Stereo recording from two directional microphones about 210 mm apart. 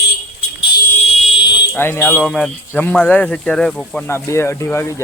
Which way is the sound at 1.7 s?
10° left (ahead or behind).